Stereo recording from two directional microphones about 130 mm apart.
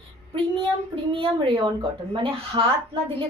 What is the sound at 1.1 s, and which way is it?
Speech, 45° right (ahead or behind).